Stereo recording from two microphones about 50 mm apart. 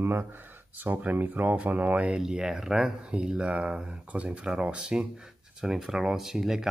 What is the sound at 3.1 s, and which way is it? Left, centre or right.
Speech, right.